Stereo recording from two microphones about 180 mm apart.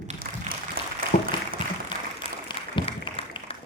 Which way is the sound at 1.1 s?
50° left (ahead or behind).